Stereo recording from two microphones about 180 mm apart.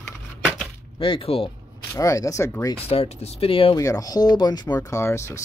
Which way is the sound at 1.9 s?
20° left (ahead or behind).